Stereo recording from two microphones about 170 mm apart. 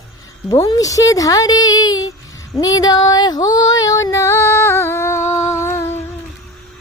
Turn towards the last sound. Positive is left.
turn(degrees=15)  # may be behind; listen again after turning